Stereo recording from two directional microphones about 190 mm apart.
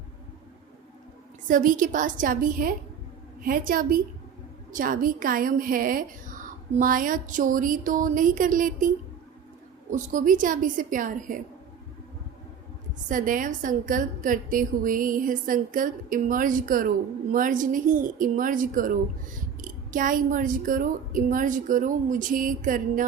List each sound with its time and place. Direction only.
1.5 s a woman's voice: 45° right (ahead or behind)
9.9 s a woman's voice: 40° right (ahead or behind)
13.1 s a woman's voice: 45° right (ahead or behind)